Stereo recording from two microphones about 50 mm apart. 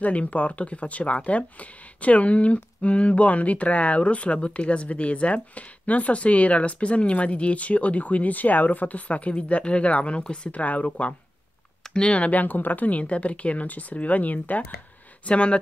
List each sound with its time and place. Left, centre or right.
0.0 s speech: left
10.5 s speech: left
11.9 s speech: left
15.2 s speech: left